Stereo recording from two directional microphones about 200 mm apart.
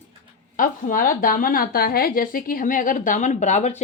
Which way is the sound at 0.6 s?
45° left (ahead or behind).